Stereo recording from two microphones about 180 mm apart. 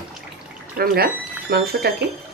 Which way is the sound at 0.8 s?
60° right (ahead or behind).